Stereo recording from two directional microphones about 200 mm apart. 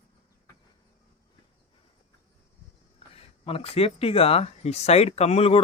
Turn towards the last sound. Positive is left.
turn(degrees=30)  # may be behind; listen again after turning